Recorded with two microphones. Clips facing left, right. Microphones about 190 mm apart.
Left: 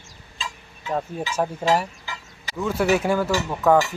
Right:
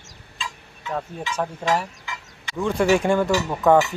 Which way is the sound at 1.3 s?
10° left (ahead or behind).